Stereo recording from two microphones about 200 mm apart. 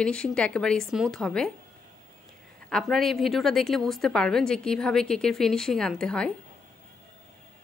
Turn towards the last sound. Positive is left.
turn(degrees=5)  # may be behind; listen again after turning